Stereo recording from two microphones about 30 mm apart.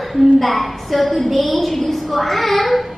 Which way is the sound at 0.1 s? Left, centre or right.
Centre.